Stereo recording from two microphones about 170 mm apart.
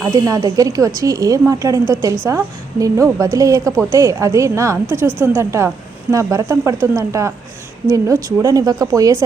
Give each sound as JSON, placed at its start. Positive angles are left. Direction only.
{"t": 0.0, "sound": "speech", "side_deg": -20}